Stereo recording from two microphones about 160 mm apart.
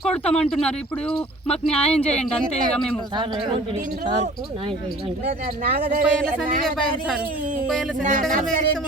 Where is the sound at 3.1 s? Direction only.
35° right (ahead or behind).